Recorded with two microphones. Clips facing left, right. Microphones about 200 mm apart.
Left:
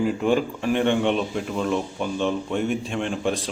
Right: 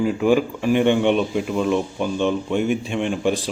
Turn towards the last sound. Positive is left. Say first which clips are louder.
# right 4 dB
turn(degrees=-5)  # may be behind; listen again after turning